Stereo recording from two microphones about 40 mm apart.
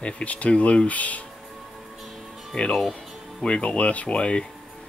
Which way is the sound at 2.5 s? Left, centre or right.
Centre.